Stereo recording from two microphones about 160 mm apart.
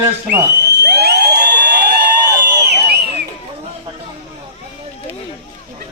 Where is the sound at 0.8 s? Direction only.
90° right.